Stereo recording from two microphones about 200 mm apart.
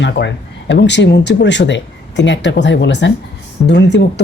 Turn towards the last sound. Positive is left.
turn(degrees=60)  # may be behind; listen again after turning